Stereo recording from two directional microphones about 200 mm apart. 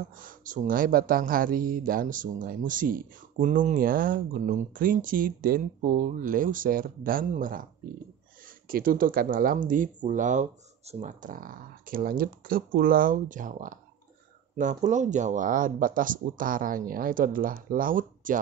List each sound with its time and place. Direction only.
0.2 s speech: 45° right (ahead or behind)
8.6 s speech: 45° right (ahead or behind)